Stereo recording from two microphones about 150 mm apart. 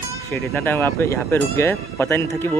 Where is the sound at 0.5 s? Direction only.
15° left (ahead or behind).